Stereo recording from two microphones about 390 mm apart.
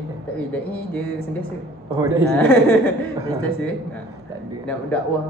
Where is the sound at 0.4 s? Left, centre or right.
Centre.